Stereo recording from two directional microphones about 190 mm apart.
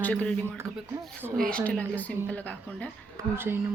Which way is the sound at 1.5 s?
5° left (ahead or behind).